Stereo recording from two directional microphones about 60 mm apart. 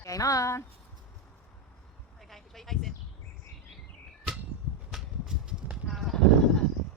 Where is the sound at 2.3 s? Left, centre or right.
Centre.